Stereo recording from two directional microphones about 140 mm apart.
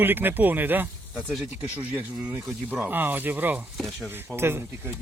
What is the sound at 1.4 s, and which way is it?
Speech, 10° right (ahead or behind).